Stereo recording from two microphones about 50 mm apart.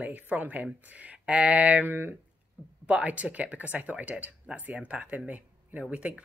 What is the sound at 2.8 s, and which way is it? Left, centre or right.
Speech, right.